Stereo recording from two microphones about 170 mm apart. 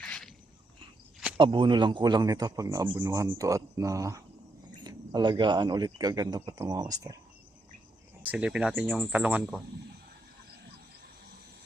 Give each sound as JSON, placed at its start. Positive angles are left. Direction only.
{"t": 0.0, "sound": "a sound", "side_deg": 5}
{"t": 1.4, "sound": "speech", "side_deg": -30}
{"t": 3.0, "sound": "speech", "side_deg": -15}
{"t": 8.2, "sound": "speech", "side_deg": -10}